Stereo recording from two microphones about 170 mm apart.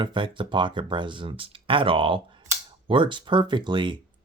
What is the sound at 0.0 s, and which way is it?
Speech, 30° right (ahead or behind).